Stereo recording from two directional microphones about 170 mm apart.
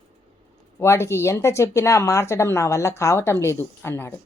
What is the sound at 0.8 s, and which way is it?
Speech, 15° left (ahead or behind).